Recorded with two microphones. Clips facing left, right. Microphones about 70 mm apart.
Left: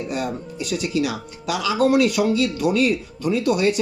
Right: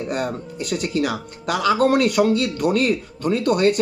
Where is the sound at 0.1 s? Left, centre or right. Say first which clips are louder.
Right 1 dB; right.